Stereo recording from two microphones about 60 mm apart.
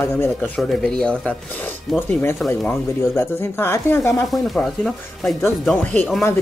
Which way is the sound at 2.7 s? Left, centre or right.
Left.